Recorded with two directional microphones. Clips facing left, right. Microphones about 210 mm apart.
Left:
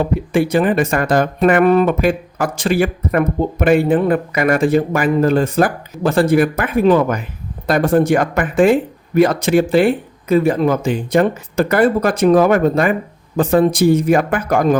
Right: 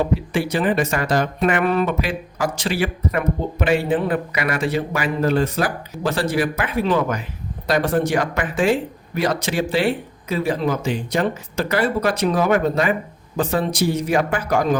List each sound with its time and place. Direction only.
0.3 s speech: 50° left (ahead or behind)